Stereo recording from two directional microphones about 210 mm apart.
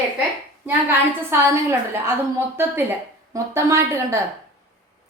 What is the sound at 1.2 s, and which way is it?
Speech, 15° right (ahead or behind).